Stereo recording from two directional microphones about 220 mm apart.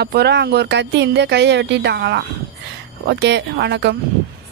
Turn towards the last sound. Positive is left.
turn(degrees=-50)  # may be behind; listen again after turning